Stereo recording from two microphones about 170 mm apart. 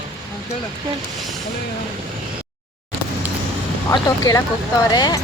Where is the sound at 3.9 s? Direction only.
20° left (ahead or behind).